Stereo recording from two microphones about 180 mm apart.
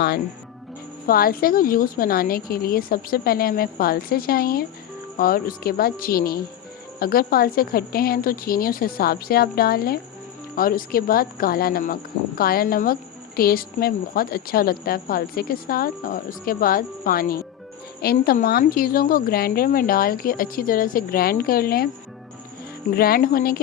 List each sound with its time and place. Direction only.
1.0 s a woman's voice: 55° left (ahead or behind)
23.0 s a woman's voice: 55° left (ahead or behind)